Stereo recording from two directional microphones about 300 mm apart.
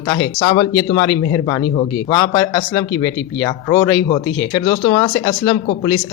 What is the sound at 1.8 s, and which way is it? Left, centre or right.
Speech, centre.